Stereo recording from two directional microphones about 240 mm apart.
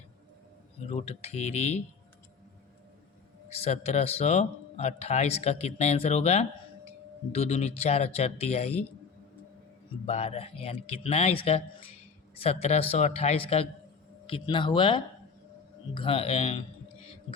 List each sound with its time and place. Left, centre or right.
0.9 s a man's voice: left
3.5 s a man's voice: left
10.1 s a man's voice: left